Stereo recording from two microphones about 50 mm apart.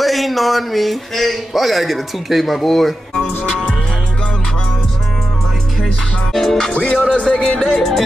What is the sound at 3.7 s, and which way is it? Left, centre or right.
Music, left.